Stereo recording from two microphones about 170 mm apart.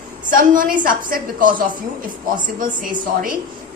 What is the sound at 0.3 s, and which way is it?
A woman's voice, 55° right (ahead or behind).